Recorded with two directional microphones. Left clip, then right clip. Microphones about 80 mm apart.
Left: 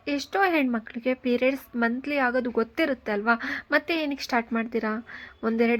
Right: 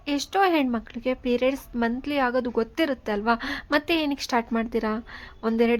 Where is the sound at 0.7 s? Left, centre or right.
Right.